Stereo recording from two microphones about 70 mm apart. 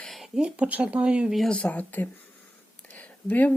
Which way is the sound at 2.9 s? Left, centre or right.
Left.